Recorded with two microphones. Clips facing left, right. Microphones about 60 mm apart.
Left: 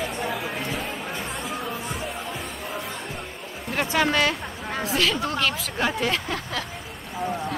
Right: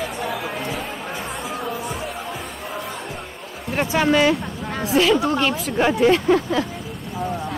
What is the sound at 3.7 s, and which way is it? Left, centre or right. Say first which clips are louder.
Speech: right 4 dB; centre.